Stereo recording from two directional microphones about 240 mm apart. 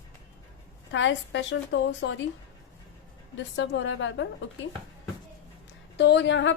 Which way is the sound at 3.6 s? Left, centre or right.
Left.